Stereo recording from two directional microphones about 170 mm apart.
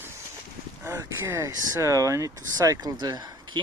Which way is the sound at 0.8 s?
15° right (ahead or behind).